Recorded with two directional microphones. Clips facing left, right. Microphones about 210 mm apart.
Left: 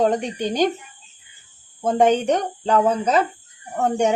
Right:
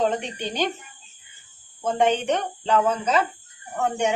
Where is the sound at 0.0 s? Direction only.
45° left (ahead or behind).